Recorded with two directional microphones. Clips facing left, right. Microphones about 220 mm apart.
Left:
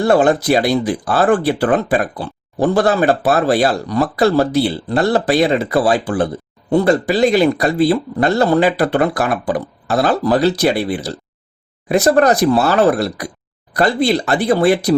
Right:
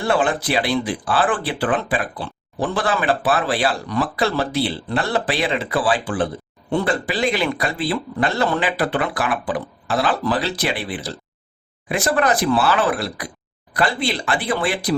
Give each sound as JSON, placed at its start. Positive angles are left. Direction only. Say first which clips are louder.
{"t": 0.0, "sound": "speech", "louder": "left 7 dB", "side_deg": 40}